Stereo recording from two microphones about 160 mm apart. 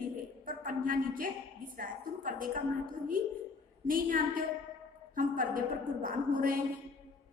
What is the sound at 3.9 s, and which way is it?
A woman's voice, 60° right (ahead or behind).